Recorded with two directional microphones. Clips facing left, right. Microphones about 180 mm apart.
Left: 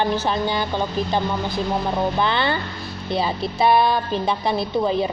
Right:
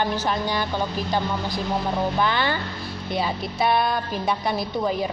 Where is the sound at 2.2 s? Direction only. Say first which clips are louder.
Left 2 dB; 30° left (ahead or behind).